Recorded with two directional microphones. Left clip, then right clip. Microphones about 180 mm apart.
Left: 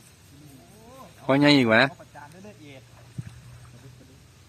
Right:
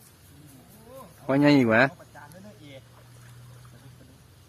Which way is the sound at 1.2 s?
15° left (ahead or behind).